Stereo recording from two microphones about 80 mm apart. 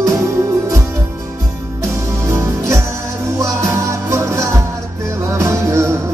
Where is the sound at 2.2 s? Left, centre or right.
Right.